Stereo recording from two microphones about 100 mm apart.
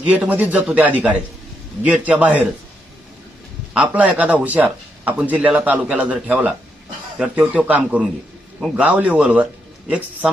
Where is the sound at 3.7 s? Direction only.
15° right (ahead or behind).